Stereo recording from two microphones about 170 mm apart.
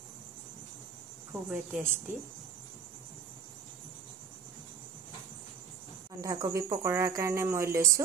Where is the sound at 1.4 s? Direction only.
5° right (ahead or behind).